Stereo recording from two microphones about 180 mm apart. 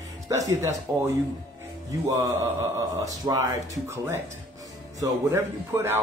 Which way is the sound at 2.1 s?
15° right (ahead or behind).